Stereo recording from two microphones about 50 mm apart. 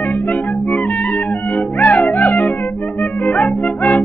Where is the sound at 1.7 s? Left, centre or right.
Left.